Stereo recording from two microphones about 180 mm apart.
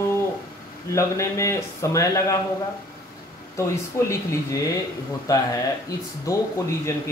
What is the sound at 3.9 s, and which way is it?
A man's voice, 15° left (ahead or behind).